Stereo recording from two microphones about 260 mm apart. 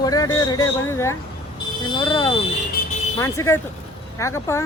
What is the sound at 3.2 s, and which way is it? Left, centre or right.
Speech, centre.